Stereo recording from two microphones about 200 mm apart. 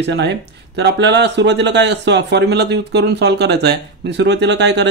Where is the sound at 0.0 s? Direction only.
60° right (ahead or behind).